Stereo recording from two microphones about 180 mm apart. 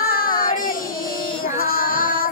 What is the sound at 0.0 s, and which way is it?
Child singing, 55° left (ahead or behind).